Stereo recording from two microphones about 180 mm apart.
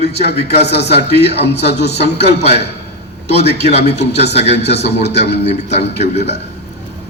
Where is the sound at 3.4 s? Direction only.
65° left (ahead or behind).